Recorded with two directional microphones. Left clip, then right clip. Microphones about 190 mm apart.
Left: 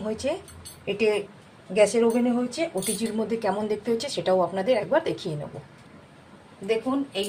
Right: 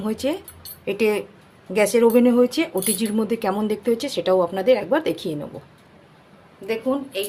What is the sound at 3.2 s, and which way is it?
A woman's voice, 35° right (ahead or behind).